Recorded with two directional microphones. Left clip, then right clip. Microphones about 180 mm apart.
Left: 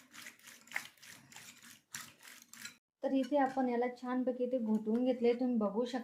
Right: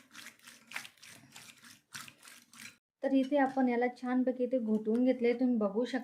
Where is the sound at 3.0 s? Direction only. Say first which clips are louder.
Right 3 dB; 35° right (ahead or behind).